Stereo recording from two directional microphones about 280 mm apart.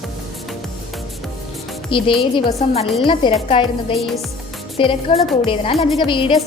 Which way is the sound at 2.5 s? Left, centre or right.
Left.